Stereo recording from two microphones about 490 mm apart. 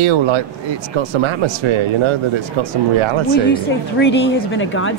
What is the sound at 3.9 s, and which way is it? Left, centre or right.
A woman's voice, left.